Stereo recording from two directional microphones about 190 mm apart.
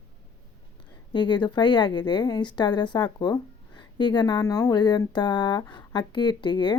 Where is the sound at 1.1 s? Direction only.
25° left (ahead or behind).